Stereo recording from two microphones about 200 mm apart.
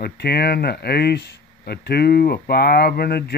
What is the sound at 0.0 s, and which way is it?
Speech, 55° left (ahead or behind).